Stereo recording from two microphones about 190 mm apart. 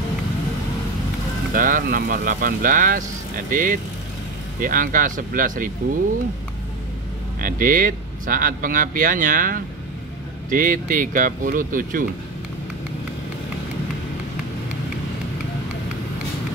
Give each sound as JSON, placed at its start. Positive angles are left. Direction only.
{"t": 1.5, "sound": "speech", "side_deg": -45}
{"t": 7.3, "sound": "speech", "side_deg": -45}